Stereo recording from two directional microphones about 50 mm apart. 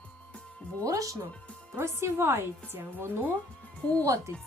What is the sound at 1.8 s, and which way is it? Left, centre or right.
Speech, right.